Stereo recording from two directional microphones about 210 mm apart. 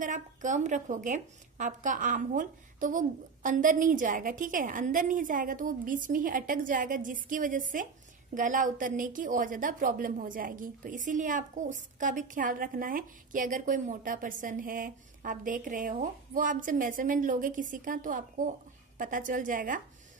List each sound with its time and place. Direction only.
0.0 s a woman's voice: 35° right (ahead or behind)